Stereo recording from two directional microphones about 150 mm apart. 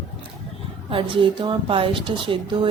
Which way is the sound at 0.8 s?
35° right (ahead or behind).